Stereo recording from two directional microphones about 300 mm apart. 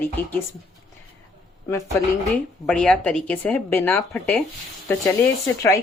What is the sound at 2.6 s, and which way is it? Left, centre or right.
Speech, centre.